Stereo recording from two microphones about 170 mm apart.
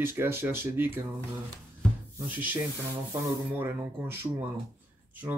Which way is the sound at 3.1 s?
15° right (ahead or behind).